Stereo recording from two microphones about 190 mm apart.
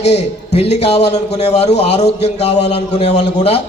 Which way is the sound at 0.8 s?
60° left (ahead or behind).